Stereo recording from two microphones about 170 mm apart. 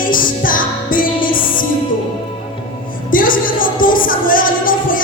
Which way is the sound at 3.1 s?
55° left (ahead or behind).